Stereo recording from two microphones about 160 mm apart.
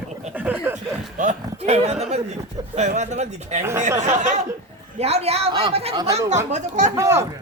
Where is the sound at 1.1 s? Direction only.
45° right (ahead or behind).